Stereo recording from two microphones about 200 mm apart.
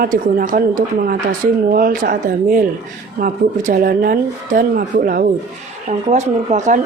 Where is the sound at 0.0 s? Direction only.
45° right (ahead or behind).